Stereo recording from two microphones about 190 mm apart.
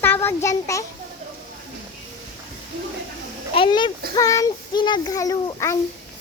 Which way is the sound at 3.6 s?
25° left (ahead or behind).